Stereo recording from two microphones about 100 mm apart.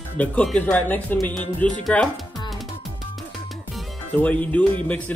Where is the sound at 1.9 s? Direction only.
Centre (ahead or behind).